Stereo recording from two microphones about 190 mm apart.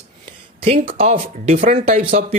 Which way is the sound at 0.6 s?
30° right (ahead or behind).